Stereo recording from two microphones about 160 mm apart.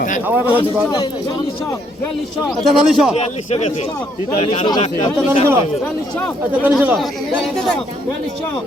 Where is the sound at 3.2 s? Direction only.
40° left (ahead or behind).